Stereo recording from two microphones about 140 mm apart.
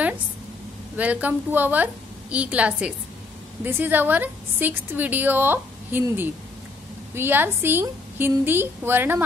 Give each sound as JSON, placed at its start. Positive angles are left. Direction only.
{"t": 0.9, "sound": "a woman's voice", "side_deg": -10}